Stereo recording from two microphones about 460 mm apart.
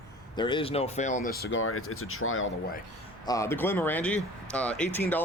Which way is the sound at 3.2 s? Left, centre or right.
Centre.